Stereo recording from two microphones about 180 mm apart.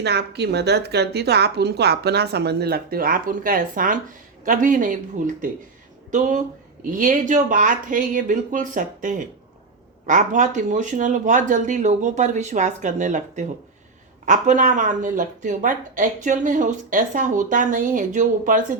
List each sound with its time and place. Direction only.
0.0 s a woman's voice: 65° right (ahead or behind); by 18.6 s 45° right (ahead or behind)